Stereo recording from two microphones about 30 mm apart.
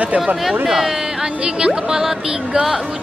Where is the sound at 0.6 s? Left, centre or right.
Centre.